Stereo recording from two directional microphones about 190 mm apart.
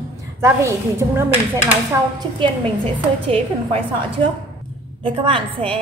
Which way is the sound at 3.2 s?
30° right (ahead or behind).